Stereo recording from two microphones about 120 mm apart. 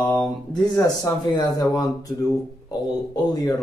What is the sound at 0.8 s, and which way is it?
Speech, 35° left (ahead or behind).